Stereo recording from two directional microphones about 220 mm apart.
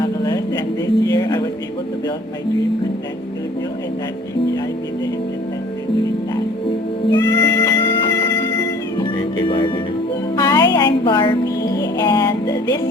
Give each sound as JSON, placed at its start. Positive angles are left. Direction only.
{"t": 0.0, "sound": "a sound", "side_deg": 20}
{"t": 1.0, "sound": "music", "side_deg": 20}
{"t": 7.1, "sound": "music", "side_deg": 20}
{"t": 10.3, "sound": "music", "side_deg": 15}